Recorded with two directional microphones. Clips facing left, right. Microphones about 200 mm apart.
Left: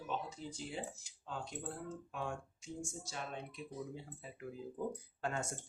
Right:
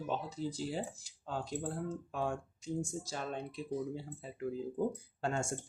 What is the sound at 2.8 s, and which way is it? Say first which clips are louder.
Speech: right 6 dB; 35° right (ahead or behind).